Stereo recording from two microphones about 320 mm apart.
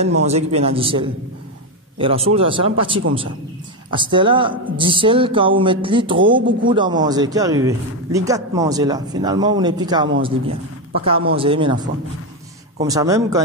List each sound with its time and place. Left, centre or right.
0.0 s a man's voice: centre